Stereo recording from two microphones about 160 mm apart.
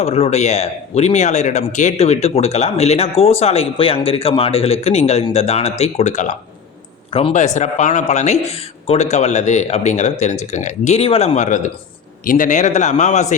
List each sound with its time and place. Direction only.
0.0 s speech: 40° left (ahead or behind)
7.1 s speech: 35° left (ahead or behind)